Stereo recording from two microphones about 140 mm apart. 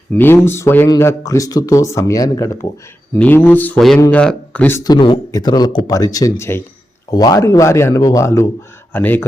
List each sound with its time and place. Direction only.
0.1 s speech: 15° left (ahead or behind)
3.2 s speech: 10° left (ahead or behind)
3.8 s speech: centre (ahead or behind)
4.8 s speech: 30° left (ahead or behind); by 9.2 s 10° left (ahead or behind)